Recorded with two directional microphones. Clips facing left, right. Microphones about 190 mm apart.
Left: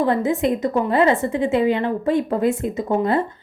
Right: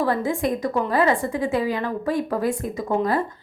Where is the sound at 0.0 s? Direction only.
20° left (ahead or behind).